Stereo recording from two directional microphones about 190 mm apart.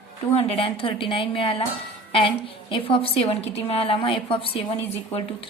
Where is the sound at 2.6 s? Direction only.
25° left (ahead or behind).